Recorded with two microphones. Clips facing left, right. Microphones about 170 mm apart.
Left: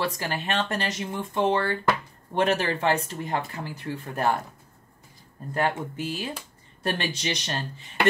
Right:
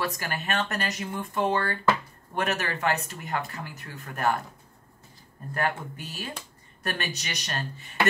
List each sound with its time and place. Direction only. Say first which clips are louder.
0.0 s speech: left 2 dB; 25° left (ahead or behind)
5.5 s speech: left 3 dB; 25° left (ahead or behind)